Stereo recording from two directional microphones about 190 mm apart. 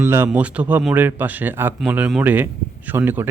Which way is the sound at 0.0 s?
10° right (ahead or behind).